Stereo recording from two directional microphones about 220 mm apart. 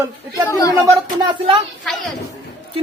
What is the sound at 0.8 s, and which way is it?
Speech, 20° right (ahead or behind).